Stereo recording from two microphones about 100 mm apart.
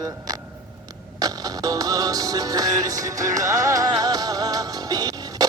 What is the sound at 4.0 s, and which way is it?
Music, 40° right (ahead or behind).